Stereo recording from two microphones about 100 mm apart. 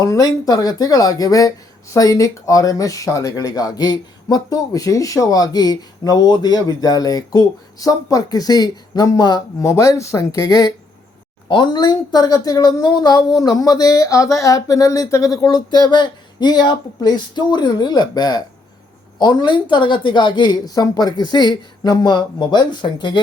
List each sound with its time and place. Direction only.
0.0 s speech: 35° left (ahead or behind)
9.6 s speech: 30° left (ahead or behind)
11.4 s a woman's voice: 50° left (ahead or behind)